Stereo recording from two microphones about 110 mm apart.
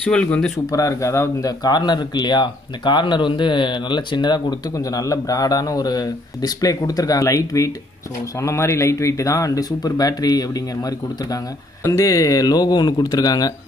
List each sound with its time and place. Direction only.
0.0 s speech: 10° left (ahead or behind)
0.7 s speech: 30° left (ahead or behind)